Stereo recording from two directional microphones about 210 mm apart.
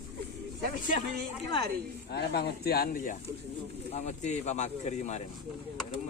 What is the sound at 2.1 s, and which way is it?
Speech, 50° left (ahead or behind).